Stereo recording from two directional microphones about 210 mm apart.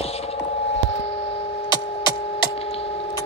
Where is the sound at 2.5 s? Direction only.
25° left (ahead or behind).